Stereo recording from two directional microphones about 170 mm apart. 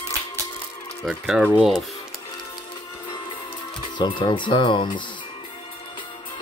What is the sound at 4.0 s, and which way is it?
Speech, 25° left (ahead or behind).